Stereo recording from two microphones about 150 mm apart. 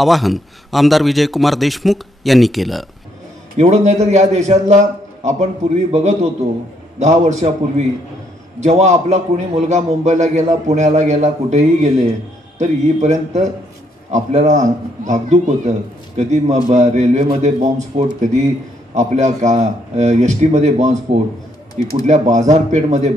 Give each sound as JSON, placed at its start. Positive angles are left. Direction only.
{"t": 0.0, "sound": "a man's voice", "side_deg": 0}
{"t": 3.5, "sound": "a man's voice", "side_deg": -50}
{"t": 22.0, "sound": "a man's voice", "side_deg": -50}